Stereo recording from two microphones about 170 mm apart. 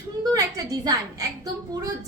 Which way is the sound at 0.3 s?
20° right (ahead or behind).